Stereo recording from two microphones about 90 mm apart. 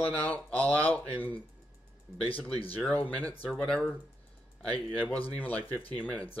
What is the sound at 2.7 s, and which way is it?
Speech, 20° left (ahead or behind).